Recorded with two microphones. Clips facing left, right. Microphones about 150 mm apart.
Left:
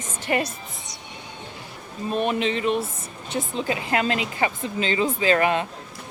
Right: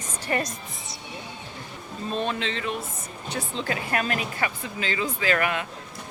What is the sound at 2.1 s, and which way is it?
Speech, 15° left (ahead or behind).